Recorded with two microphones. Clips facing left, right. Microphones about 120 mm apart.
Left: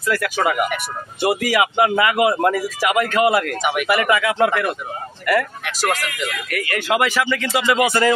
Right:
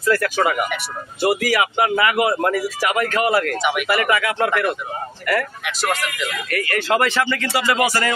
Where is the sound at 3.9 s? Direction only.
20° left (ahead or behind).